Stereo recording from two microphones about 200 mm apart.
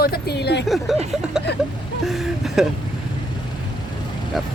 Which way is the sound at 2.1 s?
Centre (ahead or behind).